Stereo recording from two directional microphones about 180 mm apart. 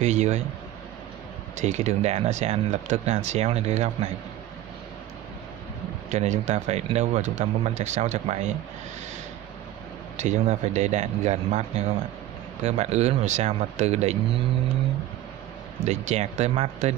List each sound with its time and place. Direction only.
0.0 s speech: 40° right (ahead or behind)
1.6 s speech: 40° right (ahead or behind)
6.0 s speech: 40° right (ahead or behind)
10.1 s speech: 40° right (ahead or behind)
15.8 s speech: 40° right (ahead or behind)